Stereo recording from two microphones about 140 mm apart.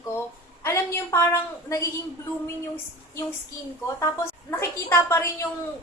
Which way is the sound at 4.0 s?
20° left (ahead or behind).